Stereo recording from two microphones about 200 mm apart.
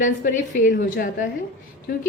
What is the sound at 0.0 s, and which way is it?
A woman's voice, 40° left (ahead or behind).